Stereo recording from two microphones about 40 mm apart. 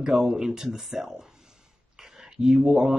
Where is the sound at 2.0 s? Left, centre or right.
Centre.